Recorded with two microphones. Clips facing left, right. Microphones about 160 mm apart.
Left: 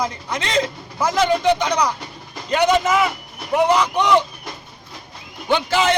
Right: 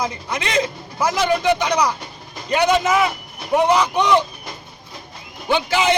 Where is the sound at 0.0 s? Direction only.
10° right (ahead or behind).